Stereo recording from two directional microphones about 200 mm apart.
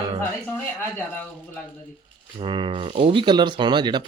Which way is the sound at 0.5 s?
5° left (ahead or behind).